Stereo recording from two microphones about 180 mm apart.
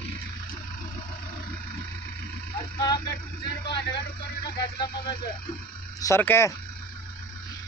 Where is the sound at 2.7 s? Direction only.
20° left (ahead or behind).